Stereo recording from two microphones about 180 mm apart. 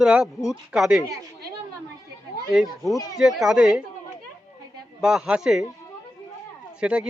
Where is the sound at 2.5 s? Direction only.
Centre (ahead or behind).